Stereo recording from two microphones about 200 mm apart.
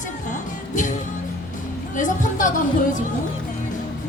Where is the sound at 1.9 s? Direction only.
40° left (ahead or behind).